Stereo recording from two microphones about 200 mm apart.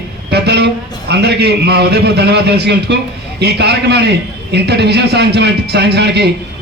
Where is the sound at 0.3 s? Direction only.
55° right (ahead or behind).